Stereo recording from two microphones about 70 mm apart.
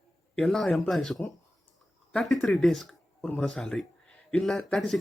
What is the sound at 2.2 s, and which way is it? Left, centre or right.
A man's voice, centre.